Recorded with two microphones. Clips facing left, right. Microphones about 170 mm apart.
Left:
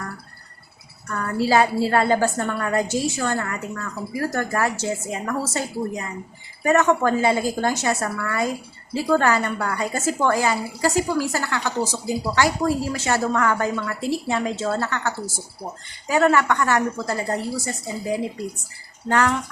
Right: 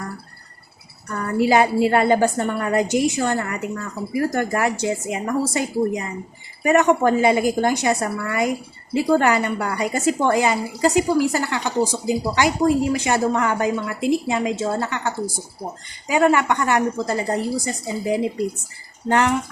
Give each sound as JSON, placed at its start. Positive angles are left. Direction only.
{"t": 1.1, "sound": "a woman's voice", "side_deg": -20}